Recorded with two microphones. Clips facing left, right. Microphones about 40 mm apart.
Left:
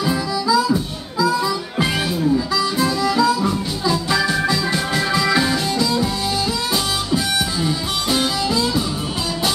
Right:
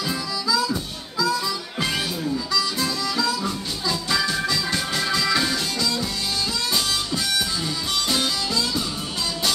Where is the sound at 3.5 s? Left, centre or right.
Centre.